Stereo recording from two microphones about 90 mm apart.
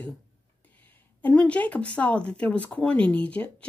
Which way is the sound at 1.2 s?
15° left (ahead or behind).